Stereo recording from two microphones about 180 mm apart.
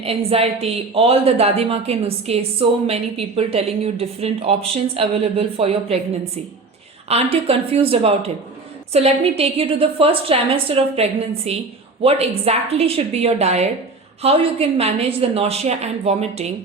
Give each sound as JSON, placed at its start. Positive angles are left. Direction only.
{"t": 0.0, "sound": "speech", "side_deg": -35}